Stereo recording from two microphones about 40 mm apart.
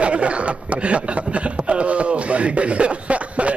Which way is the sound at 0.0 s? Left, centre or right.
Right.